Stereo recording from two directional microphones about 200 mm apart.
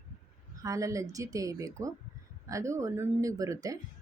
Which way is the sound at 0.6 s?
15° right (ahead or behind).